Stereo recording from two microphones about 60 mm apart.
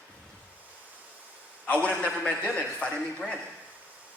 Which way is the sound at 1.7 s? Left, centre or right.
Left.